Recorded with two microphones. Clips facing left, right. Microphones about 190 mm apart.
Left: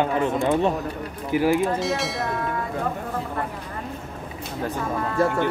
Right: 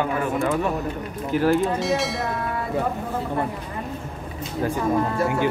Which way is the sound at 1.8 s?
Centre (ahead or behind).